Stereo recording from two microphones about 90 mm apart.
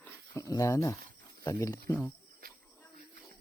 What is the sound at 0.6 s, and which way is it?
Speech, 35° left (ahead or behind).